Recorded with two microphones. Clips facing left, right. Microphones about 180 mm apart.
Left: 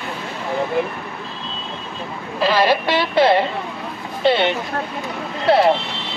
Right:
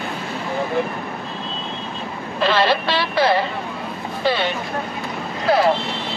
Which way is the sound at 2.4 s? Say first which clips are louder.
Left 1 dB; 10° left (ahead or behind).